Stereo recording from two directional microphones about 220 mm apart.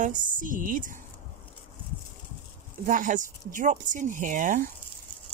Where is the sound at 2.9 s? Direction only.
35° right (ahead or behind).